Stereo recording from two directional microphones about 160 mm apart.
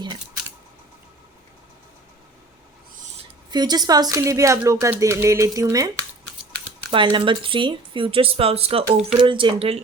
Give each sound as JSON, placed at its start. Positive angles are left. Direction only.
{"t": 3.5, "sound": "speech", "side_deg": -25}
{"t": 6.9, "sound": "speech", "side_deg": -30}